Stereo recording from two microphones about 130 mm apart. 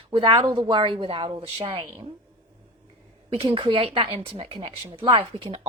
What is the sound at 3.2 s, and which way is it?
A woman's voice, 45° right (ahead or behind).